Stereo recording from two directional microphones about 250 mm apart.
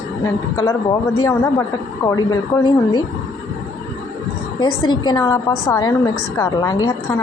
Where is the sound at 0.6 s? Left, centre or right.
Centre.